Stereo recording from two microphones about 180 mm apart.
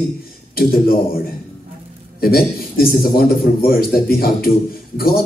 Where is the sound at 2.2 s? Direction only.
55° left (ahead or behind).